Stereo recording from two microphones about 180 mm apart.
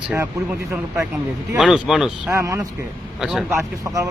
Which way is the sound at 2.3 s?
15° right (ahead or behind).